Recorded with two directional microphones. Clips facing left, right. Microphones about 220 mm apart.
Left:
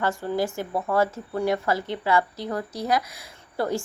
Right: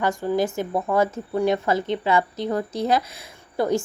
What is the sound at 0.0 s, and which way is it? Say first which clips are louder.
Speech: right 3 dB; 15° right (ahead or behind).